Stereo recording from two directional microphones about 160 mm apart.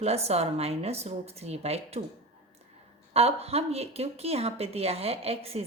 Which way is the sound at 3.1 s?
40° right (ahead or behind).